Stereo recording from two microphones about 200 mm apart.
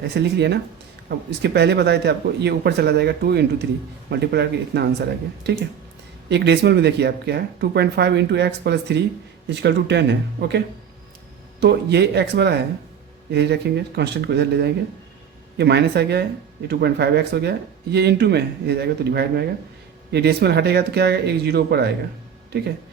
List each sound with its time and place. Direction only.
0.0 s speech: 55° right (ahead or behind)
11.6 s speech: 55° right (ahead or behind)